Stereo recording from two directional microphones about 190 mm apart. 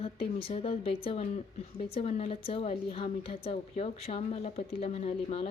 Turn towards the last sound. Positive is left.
turn(degrees=35)  # may be behind; listen again after turning